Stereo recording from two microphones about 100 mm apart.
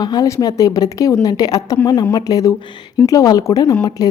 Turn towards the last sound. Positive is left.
turn(degrees=40)  # may be behind; listen again after turning